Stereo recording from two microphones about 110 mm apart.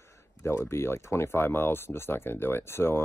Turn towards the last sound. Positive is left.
turn(degrees=20)  # may be behind; listen again after turning